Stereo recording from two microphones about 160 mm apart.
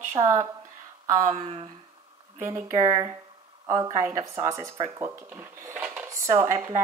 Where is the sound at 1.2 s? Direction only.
40° right (ahead or behind).